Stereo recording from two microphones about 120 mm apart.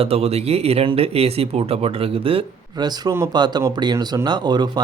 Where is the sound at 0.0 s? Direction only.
55° right (ahead or behind).